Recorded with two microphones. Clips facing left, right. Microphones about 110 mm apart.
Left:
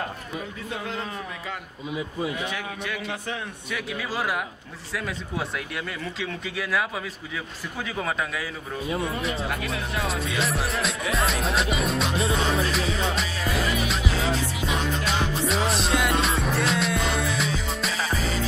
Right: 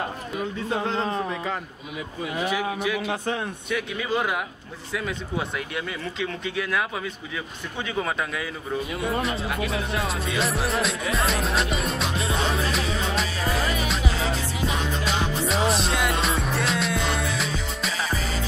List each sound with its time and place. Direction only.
0.7 s speech: 30° right (ahead or behind)
2.4 s speech: 5° right (ahead or behind)
9.2 s speech: centre (ahead or behind)
12.5 s music: centre (ahead or behind)
15.0 s music: centre (ahead or behind)